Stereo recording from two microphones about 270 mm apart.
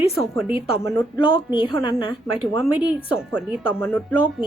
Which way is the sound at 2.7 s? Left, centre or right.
Centre.